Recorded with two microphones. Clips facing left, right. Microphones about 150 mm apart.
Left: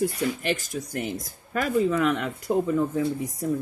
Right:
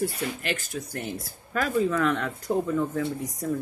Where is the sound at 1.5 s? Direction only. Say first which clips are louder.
Left 2 dB; 10° left (ahead or behind).